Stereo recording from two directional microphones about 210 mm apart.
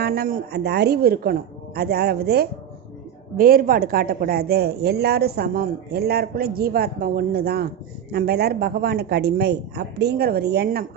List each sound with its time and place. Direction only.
0.0 s a woman's voice: 45° right (ahead or behind)